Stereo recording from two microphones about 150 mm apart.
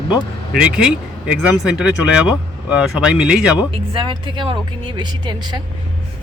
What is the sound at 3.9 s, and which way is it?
Speech, 35° right (ahead or behind).